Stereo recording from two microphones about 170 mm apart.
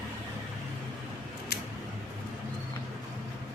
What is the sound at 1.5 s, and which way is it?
Scissors, 65° left (ahead or behind).